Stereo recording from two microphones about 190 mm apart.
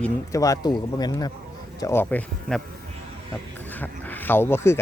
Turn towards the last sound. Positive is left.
turn(degrees=15)  # may be behind; listen again after turning